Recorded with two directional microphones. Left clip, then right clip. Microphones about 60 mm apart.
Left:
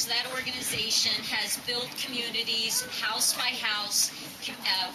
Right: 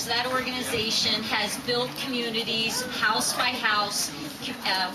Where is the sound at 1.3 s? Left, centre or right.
Left.